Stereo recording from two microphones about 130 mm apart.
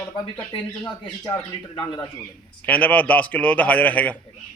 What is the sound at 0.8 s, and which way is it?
Speech, 25° left (ahead or behind).